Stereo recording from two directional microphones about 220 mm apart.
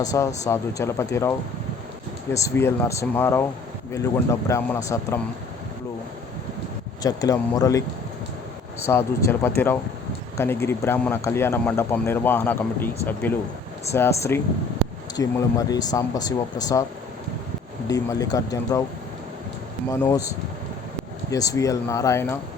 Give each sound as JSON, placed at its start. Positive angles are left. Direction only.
{"t": 0.0, "sound": "speech", "side_deg": 15}
{"t": 2.3, "sound": "speech", "side_deg": 10}
{"t": 7.0, "sound": "speech", "side_deg": 15}
{"t": 13.9, "sound": "speech", "side_deg": 10}
{"t": 17.8, "sound": "speech", "side_deg": 15}
{"t": 19.9, "sound": "speech", "side_deg": 15}
{"t": 21.2, "sound": "speech", "side_deg": 15}